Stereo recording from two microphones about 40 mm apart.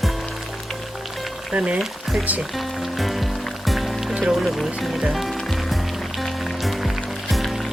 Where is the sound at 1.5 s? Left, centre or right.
Right.